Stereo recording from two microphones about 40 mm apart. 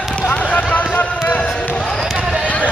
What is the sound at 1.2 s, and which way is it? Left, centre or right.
Basketball bounce, left.